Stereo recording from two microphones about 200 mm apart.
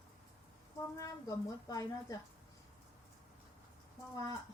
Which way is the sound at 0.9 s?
15° left (ahead or behind).